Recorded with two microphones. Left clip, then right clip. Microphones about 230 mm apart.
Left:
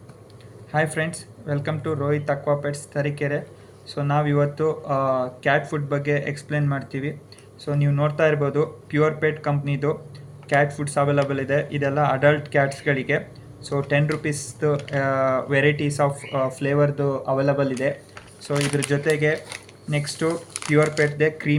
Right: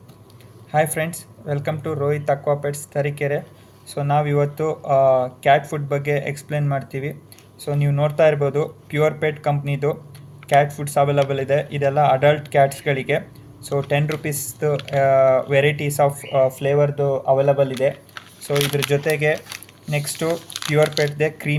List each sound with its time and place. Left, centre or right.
0.7 s speech: right